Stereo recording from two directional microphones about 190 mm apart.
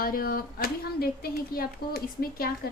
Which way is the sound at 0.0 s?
50° left (ahead or behind).